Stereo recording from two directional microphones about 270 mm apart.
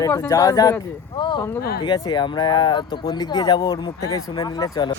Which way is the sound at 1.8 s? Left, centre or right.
Centre.